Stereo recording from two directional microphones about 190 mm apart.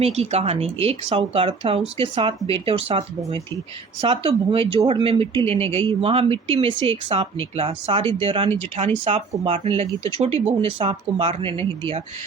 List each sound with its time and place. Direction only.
0.0 s speech: 35° right (ahead or behind)